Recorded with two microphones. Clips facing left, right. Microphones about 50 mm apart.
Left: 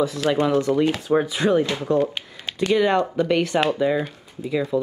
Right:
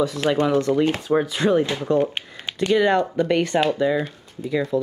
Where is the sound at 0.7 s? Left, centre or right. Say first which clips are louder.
Even; centre.